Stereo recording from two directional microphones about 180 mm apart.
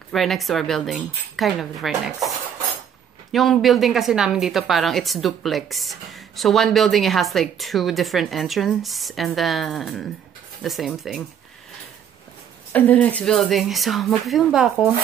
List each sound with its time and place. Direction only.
0.1 s a woman's voice: centre (ahead or behind)
12.7 s a woman's voice: 10° left (ahead or behind)